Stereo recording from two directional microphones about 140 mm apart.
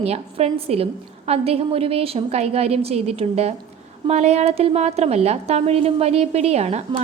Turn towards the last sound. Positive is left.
turn(degrees=-55)  # may be behind; listen again after turning